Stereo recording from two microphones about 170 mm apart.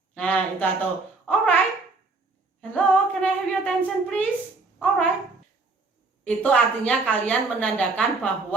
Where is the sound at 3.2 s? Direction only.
5° left (ahead or behind).